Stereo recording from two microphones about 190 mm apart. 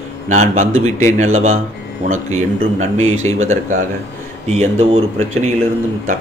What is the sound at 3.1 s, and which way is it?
Speech, 90° right.